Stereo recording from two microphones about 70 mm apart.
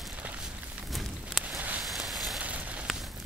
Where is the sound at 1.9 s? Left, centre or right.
Centre.